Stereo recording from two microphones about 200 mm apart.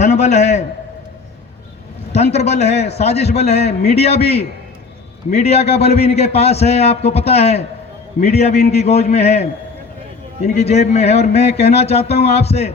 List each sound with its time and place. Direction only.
0.0 s a man's voice: 35° left (ahead or behind)
2.1 s a man's voice: 35° left (ahead or behind)